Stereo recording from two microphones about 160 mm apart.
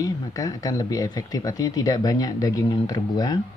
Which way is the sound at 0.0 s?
20° left (ahead or behind).